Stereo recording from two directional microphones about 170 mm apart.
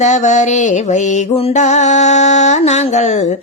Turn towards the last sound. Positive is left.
turn(degrees=45)  # may be behind; listen again after turning